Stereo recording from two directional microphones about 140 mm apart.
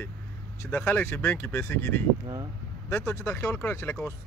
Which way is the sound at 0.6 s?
15° left (ahead or behind).